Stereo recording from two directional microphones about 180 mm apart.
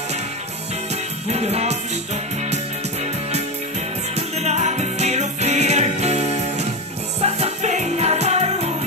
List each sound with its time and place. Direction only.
1.3 s music: 35° right (ahead or behind)
4.1 s music: 35° right (ahead or behind)